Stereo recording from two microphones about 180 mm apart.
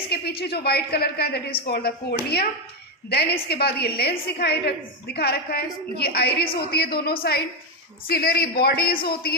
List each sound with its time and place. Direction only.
0.1 s a woman's voice: 65° left (ahead or behind)